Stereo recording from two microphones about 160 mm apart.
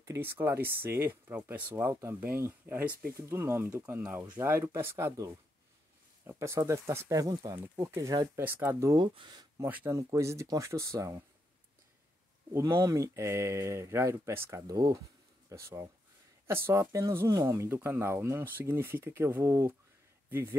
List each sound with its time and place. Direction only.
0.0 s speech: 15° right (ahead or behind)
9.7 s speech: 15° right (ahead or behind)
12.5 s speech: 15° right (ahead or behind)